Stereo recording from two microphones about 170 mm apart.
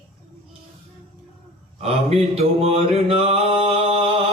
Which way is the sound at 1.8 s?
35° right (ahead or behind).